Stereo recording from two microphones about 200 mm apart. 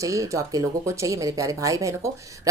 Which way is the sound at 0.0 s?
15° right (ahead or behind).